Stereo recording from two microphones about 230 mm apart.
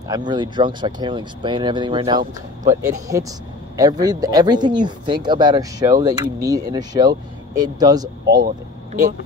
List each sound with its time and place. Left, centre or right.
0.1 s speech: centre